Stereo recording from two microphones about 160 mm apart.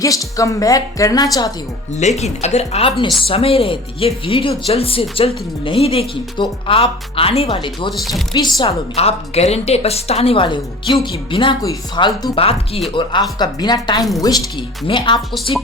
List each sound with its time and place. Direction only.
0.0 s a woman's voice: 20° left (ahead or behind)
2.0 s a woman's voice: 45° left (ahead or behind)
7.9 s speech: centre (ahead or behind)
8.3 s a woman's voice: 25° left (ahead or behind)
8.6 s a woman's voice: 40° left (ahead or behind)